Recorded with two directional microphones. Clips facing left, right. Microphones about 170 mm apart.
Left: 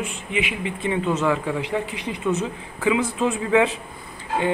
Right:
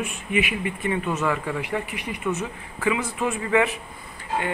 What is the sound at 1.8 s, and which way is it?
A man's voice, 25° left (ahead or behind).